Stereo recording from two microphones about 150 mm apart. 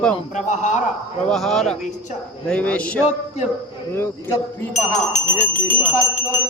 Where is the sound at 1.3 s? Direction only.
5° left (ahead or behind).